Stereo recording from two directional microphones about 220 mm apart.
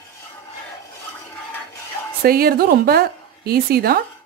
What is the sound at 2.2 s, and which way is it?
A woman's voice, 45° right (ahead or behind).